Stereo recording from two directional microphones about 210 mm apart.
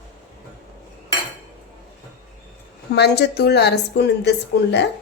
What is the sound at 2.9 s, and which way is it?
A woman's voice, 55° left (ahead or behind).